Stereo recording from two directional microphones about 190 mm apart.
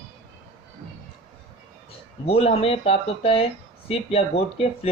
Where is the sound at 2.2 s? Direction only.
30° left (ahead or behind).